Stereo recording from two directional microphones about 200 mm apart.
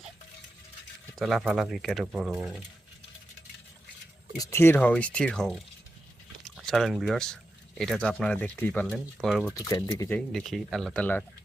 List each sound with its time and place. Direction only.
1.2 s speech: 5° right (ahead or behind)
4.4 s speech: 10° left (ahead or behind)
9.6 s speech: 20° left (ahead or behind)
10.2 s speech: centre (ahead or behind)